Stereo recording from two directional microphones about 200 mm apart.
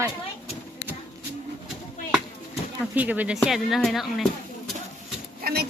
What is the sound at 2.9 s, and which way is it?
Speech, 10° right (ahead or behind).